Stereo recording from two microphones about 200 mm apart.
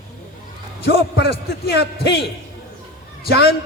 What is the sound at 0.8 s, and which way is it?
A man's voice, 55° left (ahead or behind).